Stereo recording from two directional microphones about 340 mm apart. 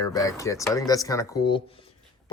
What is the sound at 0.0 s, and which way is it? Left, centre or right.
Speech, centre.